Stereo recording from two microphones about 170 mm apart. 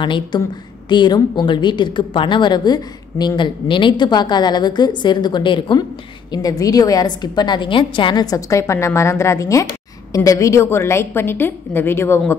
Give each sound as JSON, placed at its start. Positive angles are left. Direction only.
{"t": 0.0, "sound": "a woman's voice", "side_deg": 30}